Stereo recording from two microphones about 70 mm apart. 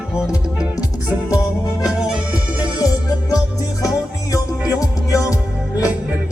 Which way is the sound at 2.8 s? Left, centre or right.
Left.